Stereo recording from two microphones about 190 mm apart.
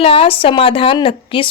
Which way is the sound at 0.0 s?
30° left (ahead or behind).